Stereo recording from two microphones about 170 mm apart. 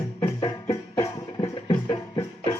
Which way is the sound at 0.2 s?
20° left (ahead or behind).